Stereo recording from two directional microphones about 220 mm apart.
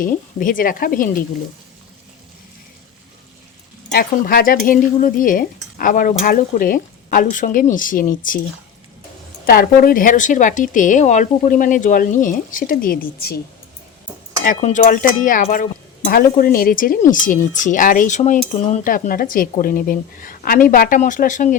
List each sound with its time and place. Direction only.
0.0 s speech: 40° left (ahead or behind)
3.9 s speech: 40° left (ahead or behind)
9.5 s speech: 40° left (ahead or behind)
14.4 s speech: 35° left (ahead or behind)